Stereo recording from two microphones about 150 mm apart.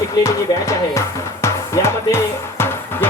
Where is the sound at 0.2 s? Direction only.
20° left (ahead or behind).